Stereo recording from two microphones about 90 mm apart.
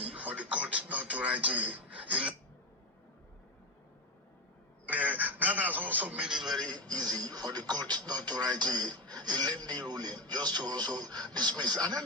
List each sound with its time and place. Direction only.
0.0 s speech: 15° right (ahead or behind)
4.9 s a man's voice: 20° right (ahead or behind)
6.2 s a man's voice: 5° right (ahead or behind)
6.5 s speech: 50° right (ahead or behind)